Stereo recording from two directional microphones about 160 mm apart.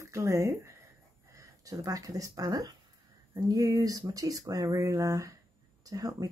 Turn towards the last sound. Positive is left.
turn(degrees=-20)  # may be behind; listen again after turning